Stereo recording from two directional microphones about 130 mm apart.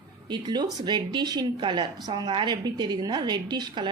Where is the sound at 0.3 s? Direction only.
35° right (ahead or behind).